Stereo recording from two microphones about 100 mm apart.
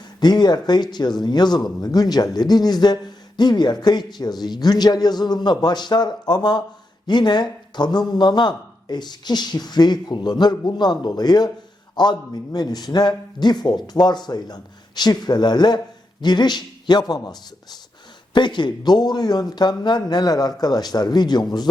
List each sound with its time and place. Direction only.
0.2 s speech: 45° left (ahead or behind)
18.3 s speech: 50° left (ahead or behind)